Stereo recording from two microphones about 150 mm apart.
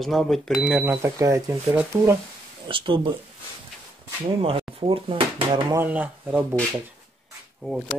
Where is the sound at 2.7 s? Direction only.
35° right (ahead or behind).